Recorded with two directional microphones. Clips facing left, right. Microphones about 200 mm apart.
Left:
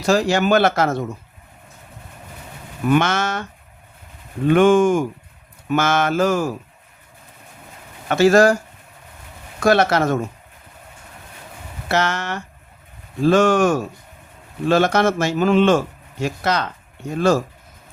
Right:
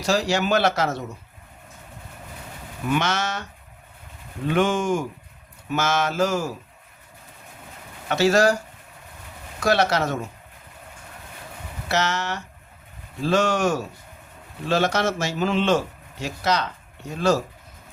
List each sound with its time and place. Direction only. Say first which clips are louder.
0.0 s speech: left 5 dB; 55° left (ahead or behind)
2.9 s speech: left 6 dB; 55° left (ahead or behind)
4.4 s speech: left 8 dB; 55° left (ahead or behind)
8.1 s speech: left 5 dB; 55° left (ahead or behind)
9.6 s speech: left 5 dB; 50° left (ahead or behind)
11.9 s speech: left 3 dB; 55° left (ahead or behind)